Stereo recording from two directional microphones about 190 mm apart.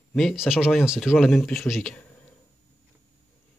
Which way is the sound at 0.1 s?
Centre (ahead or behind).